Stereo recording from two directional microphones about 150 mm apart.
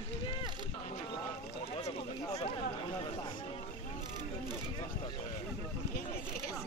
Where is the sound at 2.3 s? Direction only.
40° left (ahead or behind).